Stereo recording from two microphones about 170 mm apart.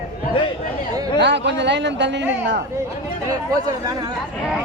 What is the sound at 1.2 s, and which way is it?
Speech, 90° right.